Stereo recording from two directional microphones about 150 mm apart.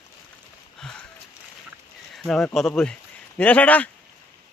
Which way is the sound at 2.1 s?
Centre (ahead or behind).